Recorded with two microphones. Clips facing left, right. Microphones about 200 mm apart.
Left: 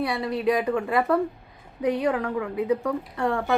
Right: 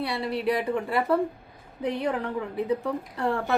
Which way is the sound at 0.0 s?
30° right (ahead or behind).